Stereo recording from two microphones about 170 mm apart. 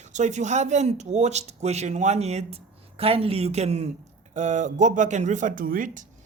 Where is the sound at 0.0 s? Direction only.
45° right (ahead or behind).